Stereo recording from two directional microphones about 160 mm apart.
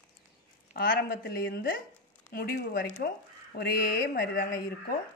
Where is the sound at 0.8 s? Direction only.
75° left (ahead or behind).